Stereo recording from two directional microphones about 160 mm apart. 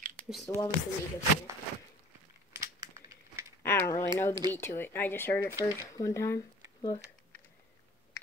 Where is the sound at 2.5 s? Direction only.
20° right (ahead or behind).